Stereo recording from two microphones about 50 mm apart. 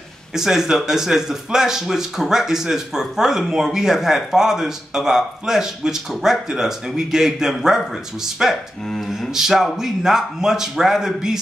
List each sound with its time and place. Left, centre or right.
0.3 s speech: centre